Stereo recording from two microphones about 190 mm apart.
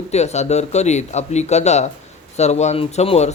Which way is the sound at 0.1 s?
35° left (ahead or behind).